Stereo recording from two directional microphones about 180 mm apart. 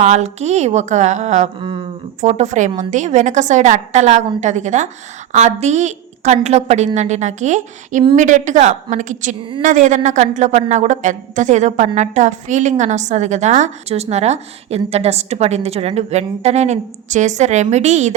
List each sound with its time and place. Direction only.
0.0 s a woman's voice: 40° right (ahead or behind)
1.5 s speech: 30° right (ahead or behind)
2.2 s a woman's voice: 40° right (ahead or behind)